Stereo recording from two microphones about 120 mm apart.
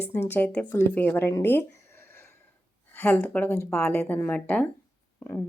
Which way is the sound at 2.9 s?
15° left (ahead or behind).